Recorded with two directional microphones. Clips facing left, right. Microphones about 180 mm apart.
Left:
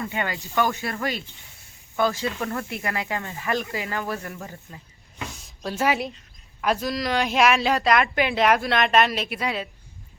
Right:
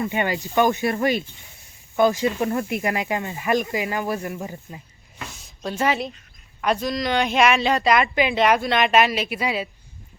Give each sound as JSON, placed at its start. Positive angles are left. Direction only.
{"t": 0.0, "sound": "speech", "side_deg": -20}
{"t": 5.3, "sound": "a sound", "side_deg": 0}
{"t": 6.6, "sound": "speech", "side_deg": 0}